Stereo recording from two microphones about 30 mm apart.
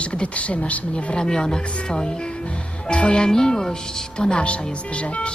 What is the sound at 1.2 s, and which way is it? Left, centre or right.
Speech, left.